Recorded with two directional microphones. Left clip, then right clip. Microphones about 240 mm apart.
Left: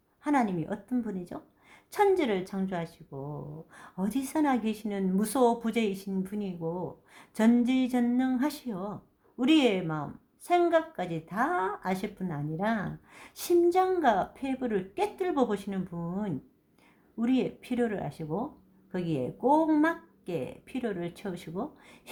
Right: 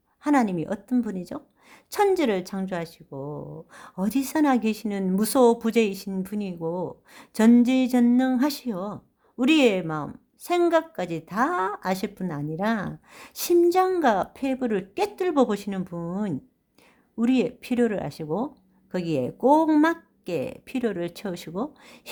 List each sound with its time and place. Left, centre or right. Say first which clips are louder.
0.2 s a woman's voice: right 5 dB; right